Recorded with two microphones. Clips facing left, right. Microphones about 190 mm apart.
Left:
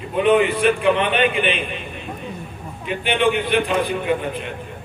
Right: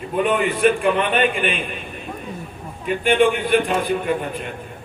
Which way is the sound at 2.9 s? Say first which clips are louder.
Right 3 dB; 45° right (ahead or behind).